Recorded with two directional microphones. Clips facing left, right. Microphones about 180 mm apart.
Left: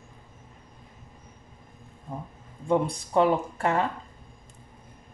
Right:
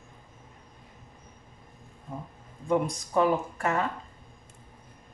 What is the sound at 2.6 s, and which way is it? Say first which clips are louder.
Speech: left 2 dB; 30° left (ahead or behind).